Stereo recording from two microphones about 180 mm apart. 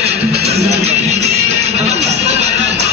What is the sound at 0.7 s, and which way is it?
Music, 35° right (ahead or behind).